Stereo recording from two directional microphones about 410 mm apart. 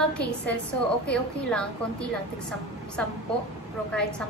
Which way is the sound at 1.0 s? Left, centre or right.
Centre.